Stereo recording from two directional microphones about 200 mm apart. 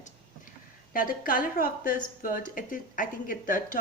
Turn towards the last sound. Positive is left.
turn(degrees=40)  # may be behind; listen again after turning